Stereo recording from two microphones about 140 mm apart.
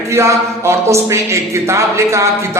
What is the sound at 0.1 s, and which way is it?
A man's voice, 20° right (ahead or behind).